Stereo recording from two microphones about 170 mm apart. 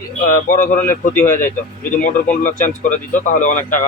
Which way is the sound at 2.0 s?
50° left (ahead or behind).